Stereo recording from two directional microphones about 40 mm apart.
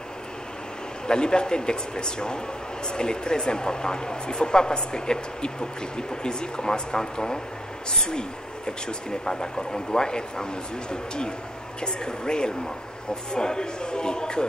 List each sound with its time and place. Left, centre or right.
1.0 s speech: left